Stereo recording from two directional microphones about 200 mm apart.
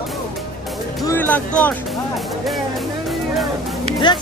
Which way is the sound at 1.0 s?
10° left (ahead or behind).